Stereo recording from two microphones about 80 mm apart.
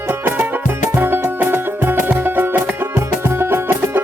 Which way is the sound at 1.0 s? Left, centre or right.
Right.